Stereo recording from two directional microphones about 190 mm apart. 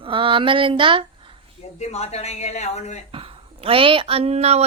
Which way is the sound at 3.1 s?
30° right (ahead or behind).